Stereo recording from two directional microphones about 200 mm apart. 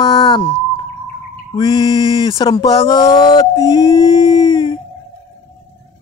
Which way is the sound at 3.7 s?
20° left (ahead or behind).